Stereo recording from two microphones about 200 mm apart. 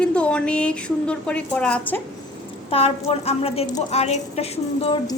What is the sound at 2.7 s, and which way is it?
A woman's voice, 30° left (ahead or behind).